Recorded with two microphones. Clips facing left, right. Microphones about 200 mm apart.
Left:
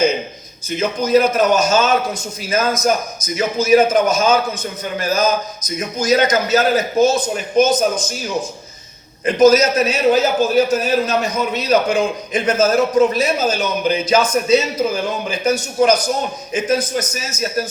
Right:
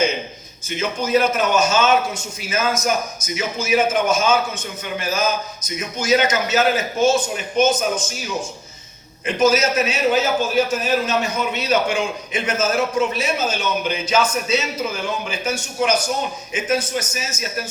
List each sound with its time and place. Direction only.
0.8 s a man's voice: 40° left (ahead or behind)
9.2 s a man's voice: 40° left (ahead or behind)